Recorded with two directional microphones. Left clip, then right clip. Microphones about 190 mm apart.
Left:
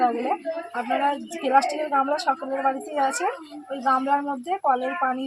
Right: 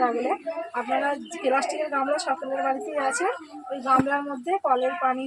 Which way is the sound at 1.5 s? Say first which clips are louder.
Left 4 dB; 20° left (ahead or behind).